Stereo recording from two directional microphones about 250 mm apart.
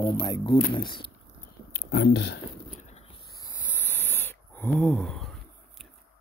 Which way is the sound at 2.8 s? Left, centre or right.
Left.